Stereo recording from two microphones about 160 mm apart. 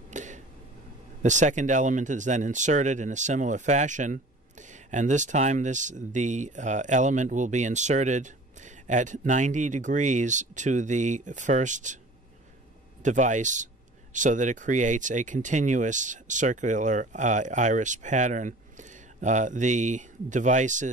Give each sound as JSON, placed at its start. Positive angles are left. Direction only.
{"t": 0.1, "sound": "a sound", "side_deg": -50}
{"t": 1.2, "sound": "speech", "side_deg": -50}
{"t": 13.0, "sound": "speech", "side_deg": -50}